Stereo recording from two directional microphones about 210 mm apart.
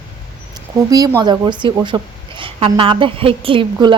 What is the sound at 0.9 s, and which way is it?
A woman's voice, 15° right (ahead or behind).